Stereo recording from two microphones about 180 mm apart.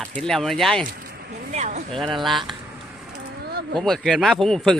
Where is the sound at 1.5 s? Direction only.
40° right (ahead or behind).